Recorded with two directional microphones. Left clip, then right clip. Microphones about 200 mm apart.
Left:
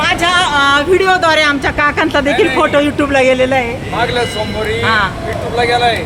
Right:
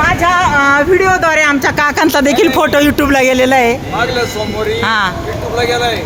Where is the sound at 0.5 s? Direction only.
30° right (ahead or behind).